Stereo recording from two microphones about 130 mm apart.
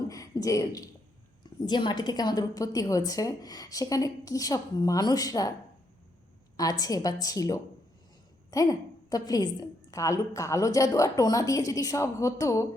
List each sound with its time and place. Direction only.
0.1 s beatboxing: 25° left (ahead or behind)
1.5 s a woman's voice: 35° left (ahead or behind)
6.6 s a woman's voice: 30° left (ahead or behind)